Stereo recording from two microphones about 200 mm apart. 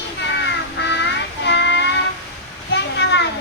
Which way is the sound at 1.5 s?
60° left (ahead or behind).